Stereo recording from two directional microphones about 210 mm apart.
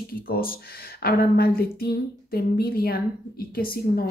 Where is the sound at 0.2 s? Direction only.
45° left (ahead or behind).